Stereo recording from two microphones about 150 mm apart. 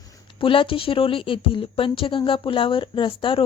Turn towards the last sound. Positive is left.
turn(degrees=35)  # may be behind; listen again after turning